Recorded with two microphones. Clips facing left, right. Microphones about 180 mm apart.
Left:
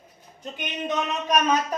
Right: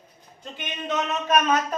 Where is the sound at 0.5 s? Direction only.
15° left (ahead or behind).